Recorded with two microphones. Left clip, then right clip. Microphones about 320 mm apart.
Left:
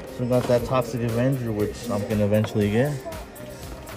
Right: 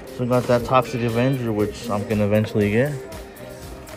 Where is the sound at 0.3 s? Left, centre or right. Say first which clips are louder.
Right 3 dB; centre.